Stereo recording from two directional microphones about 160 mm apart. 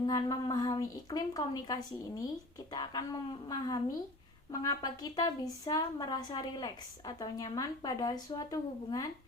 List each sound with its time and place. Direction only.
0.0 s a woman's voice: 25° left (ahead or behind)